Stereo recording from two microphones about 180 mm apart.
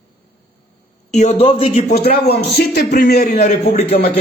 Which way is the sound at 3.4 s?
35° left (ahead or behind).